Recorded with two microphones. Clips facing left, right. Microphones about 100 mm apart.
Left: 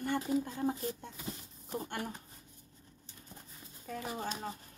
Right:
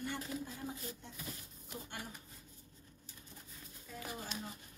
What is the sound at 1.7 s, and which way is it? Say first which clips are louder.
Speech: left 9 dB; 55° left (ahead or behind).